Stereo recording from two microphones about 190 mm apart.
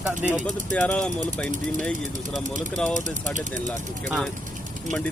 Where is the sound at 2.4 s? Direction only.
40° right (ahead or behind).